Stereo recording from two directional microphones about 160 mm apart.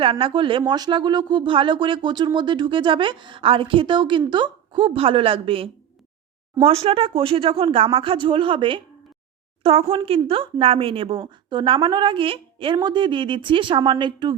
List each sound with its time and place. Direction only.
0.0 s a woman's voice: 35° right (ahead or behind)